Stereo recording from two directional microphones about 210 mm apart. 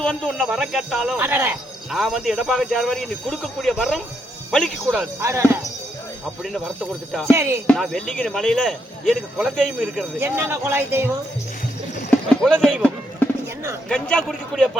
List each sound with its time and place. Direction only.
0.0 s speech: 5° left (ahead or behind)
5.2 s speech: 15° right (ahead or behind)
7.1 s speech: 10° right (ahead or behind)
7.7 s speech: 5° left (ahead or behind); by 11.2 s 10° right (ahead or behind)
12.4 s speech: 5° left (ahead or behind)